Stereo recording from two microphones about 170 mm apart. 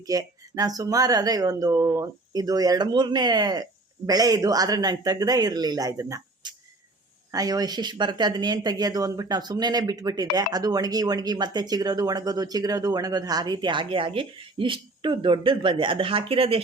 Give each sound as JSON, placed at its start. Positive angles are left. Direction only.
{"t": 0.1, "sound": "speech", "side_deg": -20}